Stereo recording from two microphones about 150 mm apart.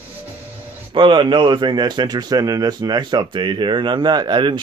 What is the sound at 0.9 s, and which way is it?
A man's voice, 30° right (ahead or behind).